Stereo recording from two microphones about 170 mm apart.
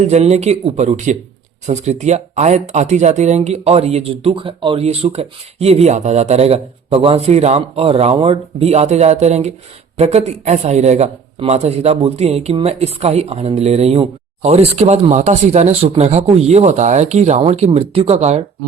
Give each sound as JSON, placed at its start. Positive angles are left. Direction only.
{"t": 0.1, "sound": "speech", "side_deg": -40}